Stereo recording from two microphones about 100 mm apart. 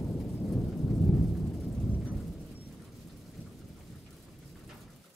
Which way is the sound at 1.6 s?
15° left (ahead or behind).